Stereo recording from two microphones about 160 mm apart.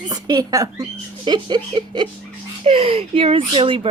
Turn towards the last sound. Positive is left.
turn(degrees=-35)  # may be behind; listen again after turning